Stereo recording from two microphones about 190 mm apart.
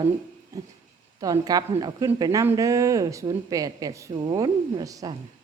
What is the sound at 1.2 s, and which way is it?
A woman's voice, 20° right (ahead or behind).